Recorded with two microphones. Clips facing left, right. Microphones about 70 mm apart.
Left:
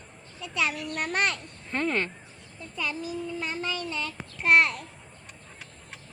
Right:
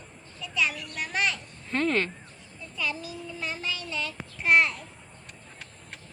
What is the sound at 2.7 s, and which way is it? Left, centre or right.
Child singing, left.